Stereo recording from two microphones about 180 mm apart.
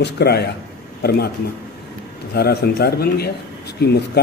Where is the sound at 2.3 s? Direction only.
65° left (ahead or behind).